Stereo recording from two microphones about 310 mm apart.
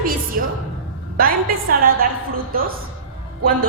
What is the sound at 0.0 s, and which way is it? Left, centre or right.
Music, right.